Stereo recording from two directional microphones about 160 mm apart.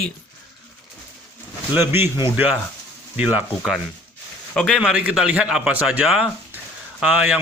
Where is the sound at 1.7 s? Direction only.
15° right (ahead or behind).